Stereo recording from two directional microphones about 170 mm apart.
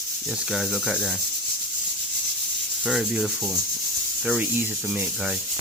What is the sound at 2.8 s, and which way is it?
Speech, 5° right (ahead or behind).